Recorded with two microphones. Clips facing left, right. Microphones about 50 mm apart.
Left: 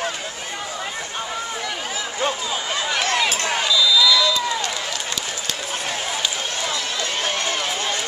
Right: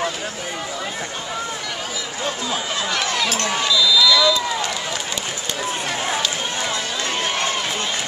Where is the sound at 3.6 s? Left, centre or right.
Centre.